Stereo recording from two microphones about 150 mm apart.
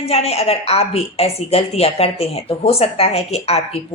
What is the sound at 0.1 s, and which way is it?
A woman's voice, 45° left (ahead or behind).